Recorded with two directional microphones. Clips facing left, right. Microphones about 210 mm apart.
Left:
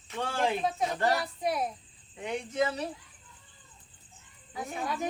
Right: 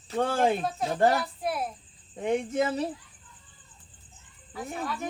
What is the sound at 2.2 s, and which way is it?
Speech, 45° right (ahead or behind).